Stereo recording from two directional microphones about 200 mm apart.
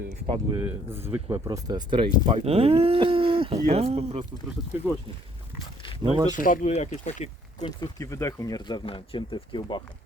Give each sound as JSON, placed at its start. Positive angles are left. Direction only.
{"t": 0.6, "sound": "speech", "side_deg": -10}
{"t": 6.0, "sound": "speech", "side_deg": -20}
{"t": 6.4, "sound": "speech", "side_deg": 40}
{"t": 7.6, "sound": "speech", "side_deg": 20}